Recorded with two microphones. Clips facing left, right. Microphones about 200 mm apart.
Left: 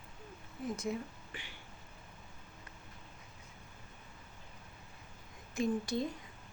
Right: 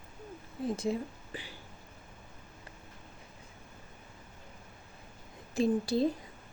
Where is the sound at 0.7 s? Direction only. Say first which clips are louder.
Right 5 dB; 30° right (ahead or behind).